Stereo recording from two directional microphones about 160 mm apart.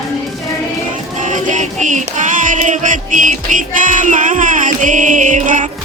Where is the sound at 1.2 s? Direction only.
50° right (ahead or behind).